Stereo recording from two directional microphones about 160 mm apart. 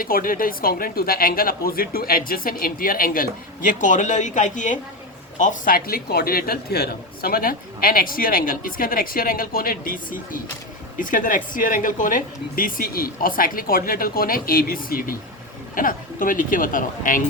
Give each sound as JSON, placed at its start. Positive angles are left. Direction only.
{"t": 0.0, "sound": "a man's voice", "side_deg": 60}